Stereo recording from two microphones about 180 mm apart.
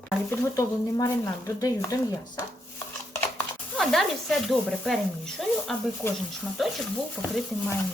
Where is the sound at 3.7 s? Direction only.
Centre (ahead or behind).